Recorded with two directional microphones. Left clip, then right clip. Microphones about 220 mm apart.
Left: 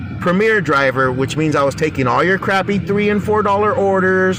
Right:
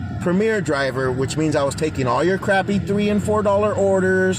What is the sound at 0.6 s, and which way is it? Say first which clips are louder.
A man's voice: left 6 dB; 20° left (ahead or behind).